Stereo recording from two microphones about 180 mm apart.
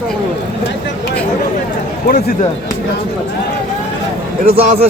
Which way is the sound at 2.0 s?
60° left (ahead or behind).